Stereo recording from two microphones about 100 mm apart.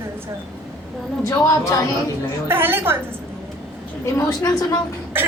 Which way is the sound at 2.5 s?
20° right (ahead or behind).